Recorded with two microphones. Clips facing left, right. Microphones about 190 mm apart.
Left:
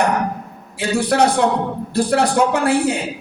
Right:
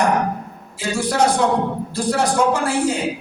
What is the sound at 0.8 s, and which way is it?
A man's voice, 65° left (ahead or behind).